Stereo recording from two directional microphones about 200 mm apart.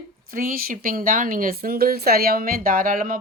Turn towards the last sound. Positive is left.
turn(degrees=-45)  # may be behind; listen again after turning